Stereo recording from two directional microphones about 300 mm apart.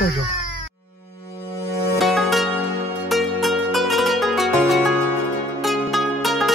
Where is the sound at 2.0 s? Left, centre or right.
Centre.